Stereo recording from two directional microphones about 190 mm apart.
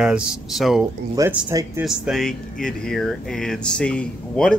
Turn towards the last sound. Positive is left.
turn(degrees=5)  # may be behind; listen again after turning